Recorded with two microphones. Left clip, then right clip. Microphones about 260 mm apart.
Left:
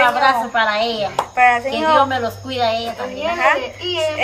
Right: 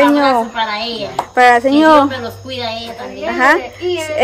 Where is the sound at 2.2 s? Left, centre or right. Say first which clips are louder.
Left 3 dB; centre.